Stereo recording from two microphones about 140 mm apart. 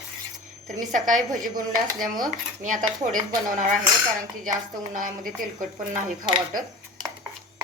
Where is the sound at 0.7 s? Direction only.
65° right (ahead or behind).